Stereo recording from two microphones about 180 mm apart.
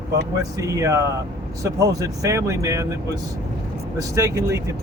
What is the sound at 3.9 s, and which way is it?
Speech, 15° right (ahead or behind).